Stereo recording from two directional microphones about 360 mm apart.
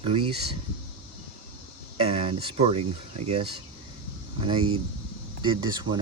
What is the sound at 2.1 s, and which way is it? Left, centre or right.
Speech, centre.